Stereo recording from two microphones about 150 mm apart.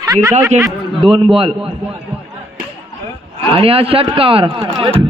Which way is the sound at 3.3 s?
40° right (ahead or behind).